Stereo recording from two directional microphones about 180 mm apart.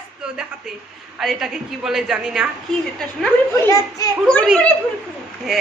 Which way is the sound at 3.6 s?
15° left (ahead or behind).